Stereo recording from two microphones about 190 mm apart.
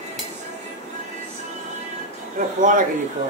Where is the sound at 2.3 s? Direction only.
45° right (ahead or behind).